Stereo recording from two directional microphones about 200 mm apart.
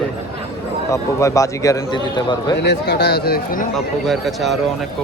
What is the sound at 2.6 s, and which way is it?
Speech, 55° left (ahead or behind).